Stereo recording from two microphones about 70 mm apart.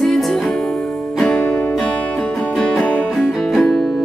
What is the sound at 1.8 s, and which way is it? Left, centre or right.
Music, centre.